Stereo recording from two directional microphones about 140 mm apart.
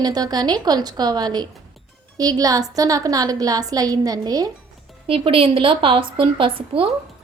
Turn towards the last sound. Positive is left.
turn(degrees=-40)  # may be behind; listen again after turning